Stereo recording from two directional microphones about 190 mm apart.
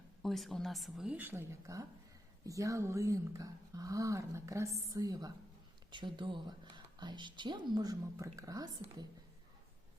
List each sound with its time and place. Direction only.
0.2 s a woman's voice: centre (ahead or behind); by 9.0 s 20° right (ahead or behind)